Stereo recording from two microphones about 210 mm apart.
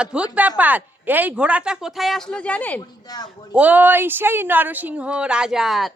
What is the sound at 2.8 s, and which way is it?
Speech, 20° left (ahead or behind).